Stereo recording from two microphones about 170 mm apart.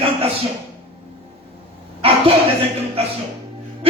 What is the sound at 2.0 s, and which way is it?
Speech, 35° right (ahead or behind).